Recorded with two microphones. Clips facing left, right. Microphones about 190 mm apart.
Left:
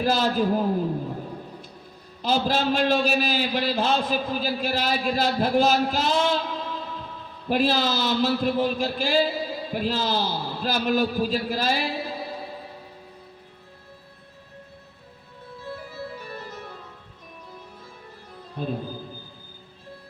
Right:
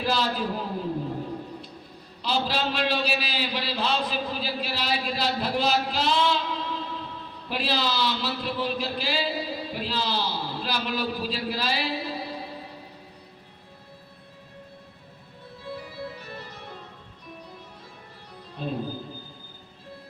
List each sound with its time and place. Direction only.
0.0 s a man's voice: 45° left (ahead or behind)
2.2 s a man's voice: 45° left (ahead or behind)
15.9 s music: 45° left (ahead or behind)
18.6 s a man's voice: 50° left (ahead or behind)